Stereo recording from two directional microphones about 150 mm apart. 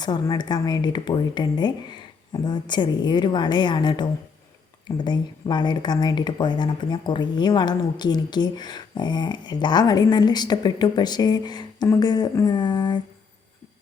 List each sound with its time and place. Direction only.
0.0 s a woman's voice: 30° left (ahead or behind)